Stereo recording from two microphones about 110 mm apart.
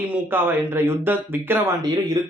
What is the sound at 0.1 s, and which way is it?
Speech, 20° right (ahead or behind).